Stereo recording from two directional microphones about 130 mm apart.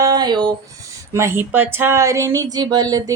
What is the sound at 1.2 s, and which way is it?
A woman's voice, 20° right (ahead or behind).